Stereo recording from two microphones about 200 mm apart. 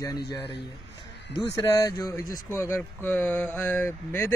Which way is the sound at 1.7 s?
15° left (ahead or behind).